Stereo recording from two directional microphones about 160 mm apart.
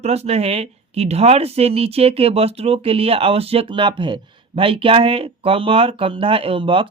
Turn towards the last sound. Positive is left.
turn(degrees=-35)  # may be behind; listen again after turning